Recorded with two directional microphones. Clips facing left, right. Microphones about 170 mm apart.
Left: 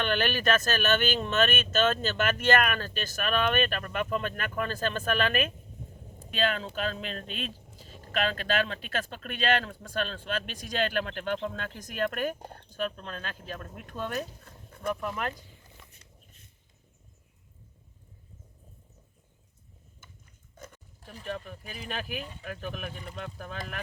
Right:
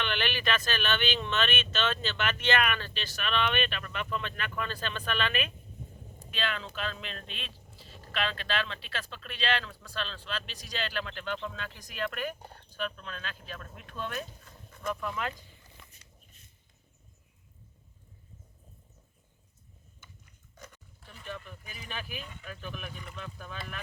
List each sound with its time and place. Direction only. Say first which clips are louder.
0.0 s speech: left 5 dB; 45° left (ahead or behind)
14.8 s speech: left 2 dB; 50° left (ahead or behind)
20.7 s speech: left 5 dB; 40° left (ahead or behind)